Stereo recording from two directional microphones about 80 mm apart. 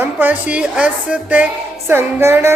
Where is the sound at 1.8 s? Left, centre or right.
Right.